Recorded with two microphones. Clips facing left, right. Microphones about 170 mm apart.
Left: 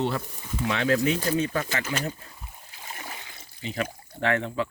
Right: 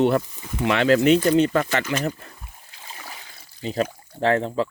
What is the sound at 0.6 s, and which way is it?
Speech, 75° right (ahead or behind).